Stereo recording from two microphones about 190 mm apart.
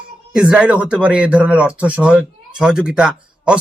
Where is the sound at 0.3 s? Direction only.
5° right (ahead or behind).